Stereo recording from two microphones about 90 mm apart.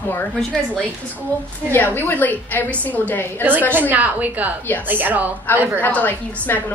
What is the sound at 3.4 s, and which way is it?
A woman's voice, 20° right (ahead or behind).